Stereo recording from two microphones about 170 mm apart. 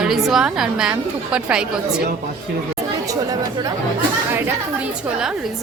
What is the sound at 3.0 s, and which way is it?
Chatter, 20° right (ahead or behind).